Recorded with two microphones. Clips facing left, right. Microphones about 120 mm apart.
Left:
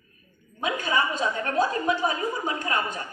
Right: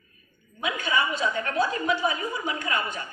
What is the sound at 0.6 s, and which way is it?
A woman's voice, 40° left (ahead or behind).